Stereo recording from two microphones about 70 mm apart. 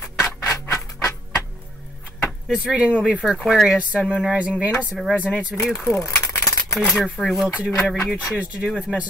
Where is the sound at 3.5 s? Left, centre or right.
Centre.